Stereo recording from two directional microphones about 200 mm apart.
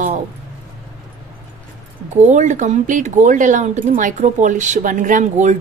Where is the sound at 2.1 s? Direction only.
35° right (ahead or behind).